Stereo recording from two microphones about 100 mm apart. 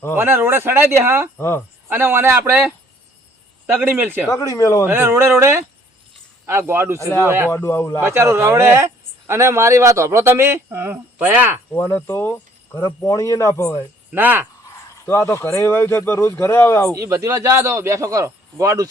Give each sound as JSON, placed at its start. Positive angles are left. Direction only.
{"t": 0.2, "sound": "speech", "side_deg": -25}
{"t": 1.4, "sound": "speech", "side_deg": 25}
{"t": 1.9, "sound": "speech", "side_deg": -20}
{"t": 4.3, "sound": "a man's voice", "side_deg": 35}
{"t": 4.9, "sound": "speech", "side_deg": -20}
{"t": 7.5, "sound": "speech", "side_deg": 25}
{"t": 8.0, "sound": "speech", "side_deg": -25}
{"t": 11.7, "sound": "a man's voice", "side_deg": 20}
{"t": 14.1, "sound": "speech", "side_deg": -20}
{"t": 15.0, "sound": "speech", "side_deg": 25}
{"t": 16.9, "sound": "speech", "side_deg": -30}